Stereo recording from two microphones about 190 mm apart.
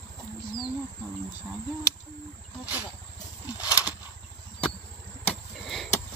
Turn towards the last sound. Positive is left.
turn(degrees=0)  # may be behind; listen again after turning